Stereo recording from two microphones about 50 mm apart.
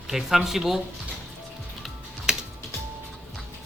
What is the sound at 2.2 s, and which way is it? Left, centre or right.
Music, centre.